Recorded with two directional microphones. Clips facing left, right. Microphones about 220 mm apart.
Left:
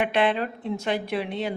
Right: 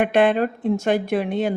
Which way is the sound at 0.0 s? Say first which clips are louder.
Right 6 dB; 45° right (ahead or behind).